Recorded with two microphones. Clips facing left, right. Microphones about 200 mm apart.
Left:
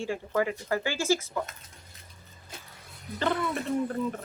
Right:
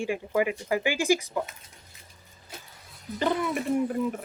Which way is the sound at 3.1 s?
15° right (ahead or behind).